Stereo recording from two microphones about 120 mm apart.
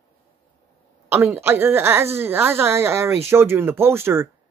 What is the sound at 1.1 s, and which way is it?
Speech, 20° right (ahead or behind).